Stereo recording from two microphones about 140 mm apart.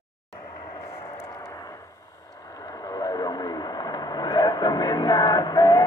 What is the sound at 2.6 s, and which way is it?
Vehicle, 30° left (ahead or behind).